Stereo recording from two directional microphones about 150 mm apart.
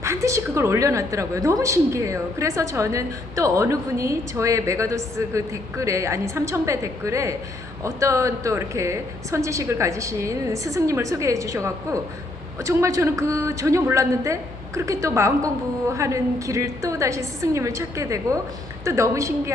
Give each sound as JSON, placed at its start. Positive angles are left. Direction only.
{"t": 0.0, "sound": "a woman's voice", "side_deg": -20}